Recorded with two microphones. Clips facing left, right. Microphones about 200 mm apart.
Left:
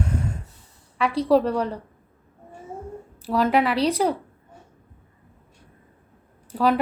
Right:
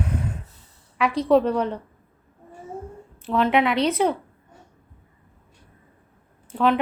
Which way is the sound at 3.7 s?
35° left (ahead or behind).